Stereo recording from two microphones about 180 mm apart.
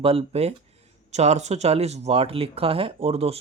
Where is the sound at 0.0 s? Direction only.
30° right (ahead or behind).